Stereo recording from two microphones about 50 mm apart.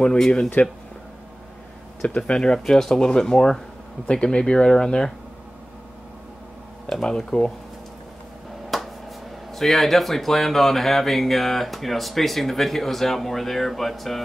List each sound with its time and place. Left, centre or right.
0.6 s speech: left
2.0 s speech: left
6.9 s speech: centre
8.6 s a sound: centre
9.5 s speech: centre